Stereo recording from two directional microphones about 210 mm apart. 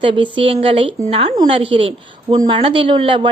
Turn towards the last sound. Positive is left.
turn(degrees=-25)  # may be behind; listen again after turning